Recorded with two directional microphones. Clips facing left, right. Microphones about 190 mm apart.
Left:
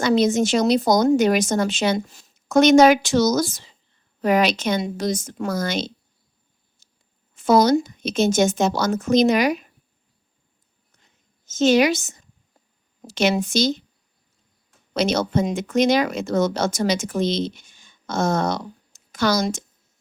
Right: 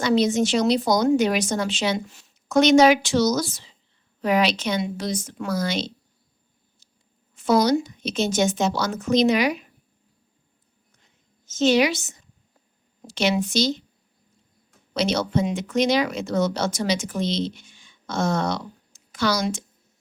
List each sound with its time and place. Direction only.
0.0 s speech: 45° left (ahead or behind)
6.8 s a sound: 50° left (ahead or behind)
7.4 s speech: 45° left (ahead or behind)
11.4 s a woman's voice: 45° left (ahead or behind)
14.9 s speech: 45° left (ahead or behind)